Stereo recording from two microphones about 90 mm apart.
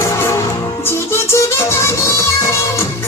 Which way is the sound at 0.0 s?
30° left (ahead or behind).